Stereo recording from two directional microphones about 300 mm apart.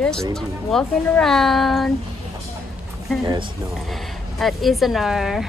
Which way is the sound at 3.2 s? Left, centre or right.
Centre.